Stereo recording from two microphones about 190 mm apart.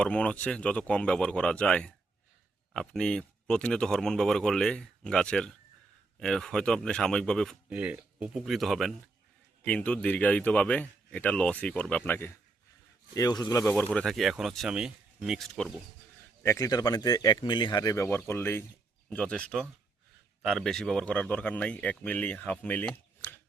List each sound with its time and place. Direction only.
0.0 s a man's voice: 5° left (ahead or behind)
7.7 s a man's voice: 5° right (ahead or behind)
16.4 s a man's voice: 15° left (ahead or behind)